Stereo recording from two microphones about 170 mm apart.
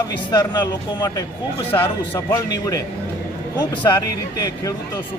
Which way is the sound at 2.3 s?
20° left (ahead or behind).